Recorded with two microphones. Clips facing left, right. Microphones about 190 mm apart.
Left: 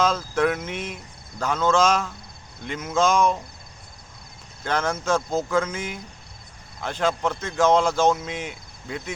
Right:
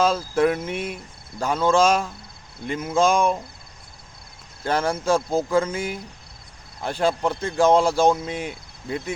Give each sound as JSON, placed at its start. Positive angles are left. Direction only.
{"t": 0.0, "sound": "speech", "side_deg": -30}
{"t": 4.6, "sound": "speech", "side_deg": -35}
{"t": 8.1, "sound": "cricket", "side_deg": -30}